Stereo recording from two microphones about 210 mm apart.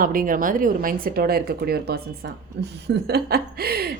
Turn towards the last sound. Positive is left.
turn(degrees=-45)  # may be behind; listen again after turning